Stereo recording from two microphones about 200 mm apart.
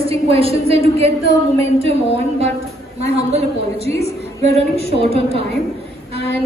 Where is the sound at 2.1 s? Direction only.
30° right (ahead or behind).